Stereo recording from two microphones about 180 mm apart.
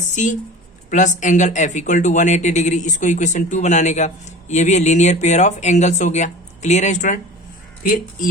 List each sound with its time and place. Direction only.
0.1 s speech: 45° left (ahead or behind)